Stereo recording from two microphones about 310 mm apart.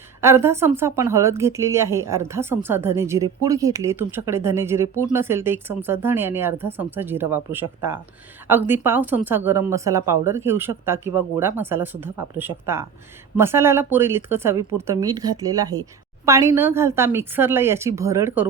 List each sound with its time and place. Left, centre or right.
0.2 s speech: centre